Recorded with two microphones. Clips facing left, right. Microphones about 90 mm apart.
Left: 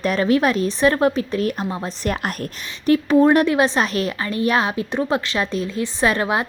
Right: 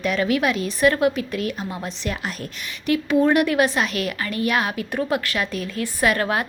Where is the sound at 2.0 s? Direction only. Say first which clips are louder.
Left 4 dB; 45° left (ahead or behind).